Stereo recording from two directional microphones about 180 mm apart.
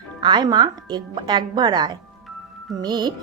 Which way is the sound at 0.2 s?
25° right (ahead or behind).